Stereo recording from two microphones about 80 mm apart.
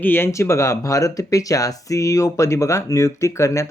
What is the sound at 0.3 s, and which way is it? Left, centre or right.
Speech, left.